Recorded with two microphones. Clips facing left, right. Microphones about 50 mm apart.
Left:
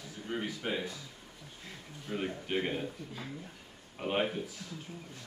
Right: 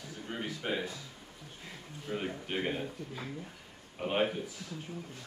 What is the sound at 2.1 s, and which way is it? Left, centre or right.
Speech, centre.